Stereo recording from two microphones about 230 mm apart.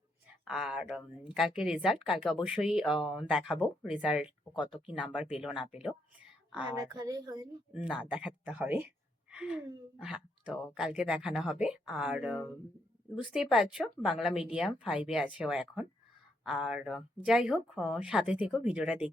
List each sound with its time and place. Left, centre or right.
0.4 s a woman's voice: centre
6.7 s a woman's voice: centre
7.7 s a woman's voice: centre
9.3 s gasp: centre
10.0 s a woman's voice: centre